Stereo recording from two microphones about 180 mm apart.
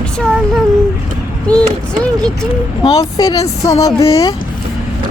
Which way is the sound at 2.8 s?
20° left (ahead or behind).